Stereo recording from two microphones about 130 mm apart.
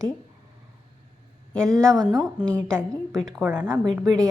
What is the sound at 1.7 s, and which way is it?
Speech, 25° right (ahead or behind).